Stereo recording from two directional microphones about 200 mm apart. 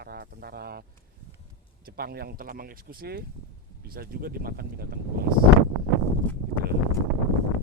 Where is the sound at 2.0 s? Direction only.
50° right (ahead or behind).